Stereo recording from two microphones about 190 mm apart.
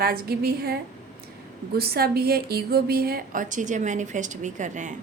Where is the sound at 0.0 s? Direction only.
55° right (ahead or behind).